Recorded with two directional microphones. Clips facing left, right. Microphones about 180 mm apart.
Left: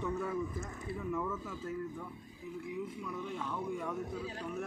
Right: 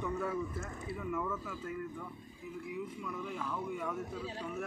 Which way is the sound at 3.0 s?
Centre (ahead or behind).